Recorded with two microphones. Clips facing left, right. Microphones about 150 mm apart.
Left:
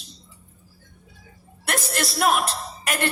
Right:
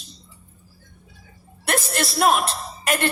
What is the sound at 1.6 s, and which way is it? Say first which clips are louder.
A woman's voice: right 3 dB; 25° right (ahead or behind).